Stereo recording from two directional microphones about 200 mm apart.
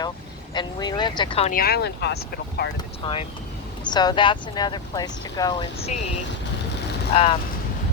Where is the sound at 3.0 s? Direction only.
25° left (ahead or behind).